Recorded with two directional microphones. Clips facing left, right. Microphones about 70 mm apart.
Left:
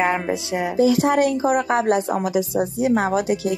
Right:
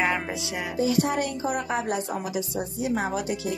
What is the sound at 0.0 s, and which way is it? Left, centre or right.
Music, left.